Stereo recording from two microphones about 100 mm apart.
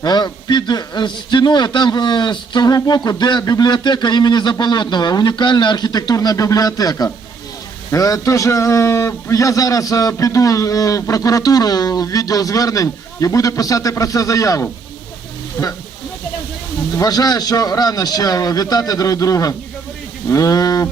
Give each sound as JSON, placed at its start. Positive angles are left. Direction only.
{"t": 0.0, "sound": "a man's voice", "side_deg": 40}
{"t": 17.0, "sound": "a man's voice", "side_deg": 40}